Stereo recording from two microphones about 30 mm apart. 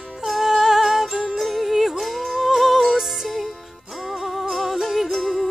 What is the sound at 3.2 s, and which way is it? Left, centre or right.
Music, centre.